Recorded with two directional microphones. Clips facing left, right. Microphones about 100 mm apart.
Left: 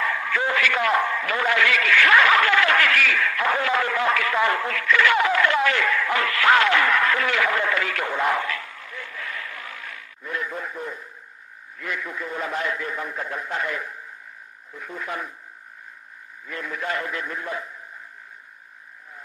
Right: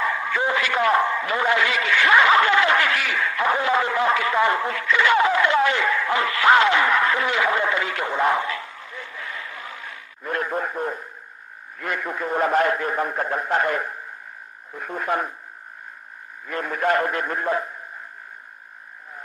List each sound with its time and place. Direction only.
0.0 s a man's voice: 20° right (ahead or behind)
10.2 s a man's voice: 55° right (ahead or behind)
16.5 s a man's voice: 50° right (ahead or behind)